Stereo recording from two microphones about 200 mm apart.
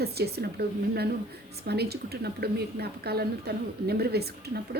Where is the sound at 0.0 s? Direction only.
50° right (ahead or behind).